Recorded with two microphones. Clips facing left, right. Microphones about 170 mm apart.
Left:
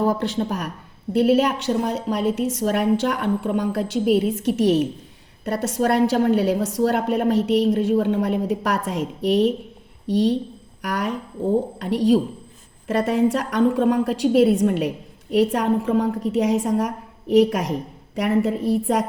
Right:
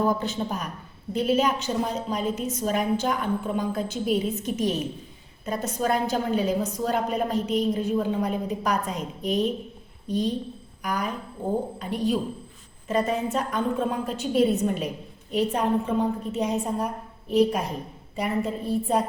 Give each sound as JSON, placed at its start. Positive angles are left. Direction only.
{"t": 0.2, "sound": "a woman's voice", "side_deg": 85}
{"t": 8.0, "sound": "a woman's voice", "side_deg": 75}